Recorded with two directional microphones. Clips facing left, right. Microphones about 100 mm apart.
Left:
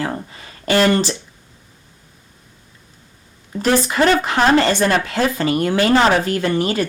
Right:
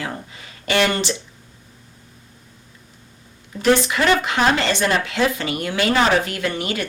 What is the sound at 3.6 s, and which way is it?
Speech, 35° left (ahead or behind).